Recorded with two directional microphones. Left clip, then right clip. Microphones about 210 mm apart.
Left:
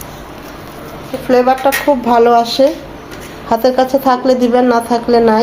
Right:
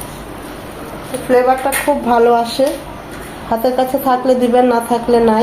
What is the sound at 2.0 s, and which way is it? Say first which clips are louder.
A woman's voice: left 2 dB; 25° left (ahead or behind).